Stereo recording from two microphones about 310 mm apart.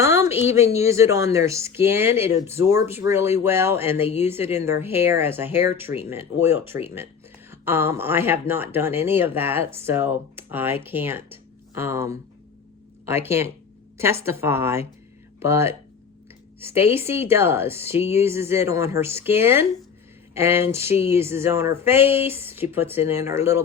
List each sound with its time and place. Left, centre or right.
0.0 s a sound: centre
0.8 s speech: centre
4.0 s speech: left
4.3 s speech: centre